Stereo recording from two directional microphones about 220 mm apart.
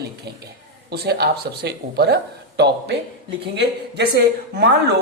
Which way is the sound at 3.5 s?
50° right (ahead or behind).